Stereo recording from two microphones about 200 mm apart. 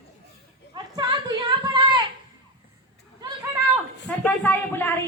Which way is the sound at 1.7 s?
25° right (ahead or behind).